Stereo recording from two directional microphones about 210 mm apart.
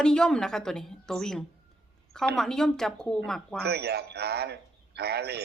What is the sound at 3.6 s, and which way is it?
A man's voice, 50° right (ahead or behind).